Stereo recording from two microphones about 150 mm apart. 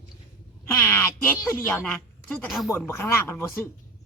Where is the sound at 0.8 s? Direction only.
15° left (ahead or behind).